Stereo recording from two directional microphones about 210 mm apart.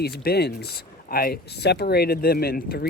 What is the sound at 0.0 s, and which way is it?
Speech, 50° left (ahead or behind).